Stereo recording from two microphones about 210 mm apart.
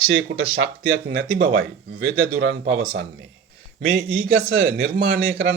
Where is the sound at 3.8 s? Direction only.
45° right (ahead or behind).